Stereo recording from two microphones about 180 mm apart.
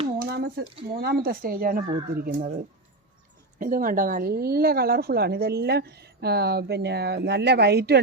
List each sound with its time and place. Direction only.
0.2 s a sound: 60° right (ahead or behind)
0.9 s a woman's voice: 55° right (ahead or behind)
3.6 s a woman's voice: 50° right (ahead or behind); by 8.0 s 65° right (ahead or behind)